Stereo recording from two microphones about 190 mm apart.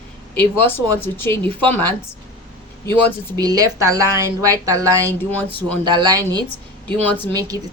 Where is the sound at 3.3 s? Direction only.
20° right (ahead or behind).